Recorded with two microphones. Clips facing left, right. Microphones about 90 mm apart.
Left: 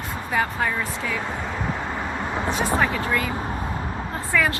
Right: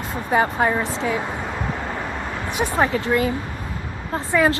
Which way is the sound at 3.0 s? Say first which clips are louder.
Right 4 dB; 30° right (ahead or behind).